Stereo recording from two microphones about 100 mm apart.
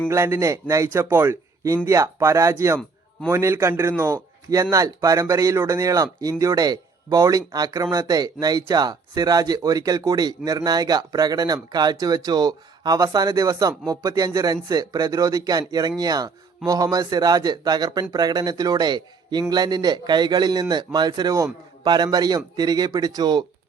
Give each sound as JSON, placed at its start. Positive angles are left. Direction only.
{"t": 0.1, "sound": "a man's voice", "side_deg": -30}